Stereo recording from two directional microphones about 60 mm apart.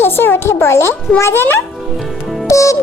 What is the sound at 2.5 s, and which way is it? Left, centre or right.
Music, left.